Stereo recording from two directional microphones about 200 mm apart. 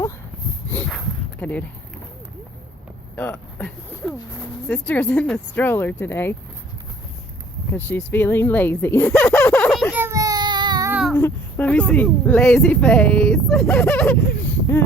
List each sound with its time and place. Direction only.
0.7 s a sound: 5° left (ahead or behind)
3.2 s speech: 10° left (ahead or behind)
7.7 s speech: 10° left (ahead or behind)
9.9 s baby cry: 15° right (ahead or behind)
11.1 s speech: 10° left (ahead or behind)